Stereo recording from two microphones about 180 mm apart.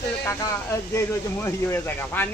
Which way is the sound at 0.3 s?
15° left (ahead or behind).